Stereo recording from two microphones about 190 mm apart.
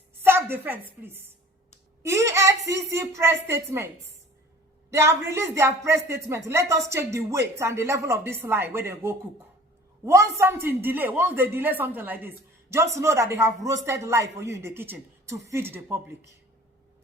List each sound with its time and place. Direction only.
0.2 s a woman's voice: 10° right (ahead or behind)
4.9 s speech: 15° right (ahead or behind)